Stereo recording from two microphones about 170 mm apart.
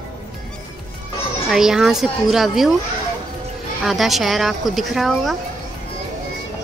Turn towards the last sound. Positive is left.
turn(degrees=0)  # may be behind; listen again after turning